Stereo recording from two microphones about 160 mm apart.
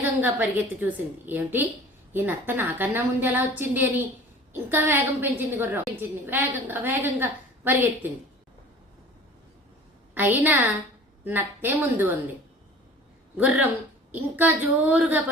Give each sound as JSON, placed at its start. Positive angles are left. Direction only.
{"t": 0.2, "sound": "a woman's voice", "side_deg": -10}
{"t": 10.2, "sound": "a woman's voice", "side_deg": -10}
{"t": 13.3, "sound": "a woman's voice", "side_deg": -10}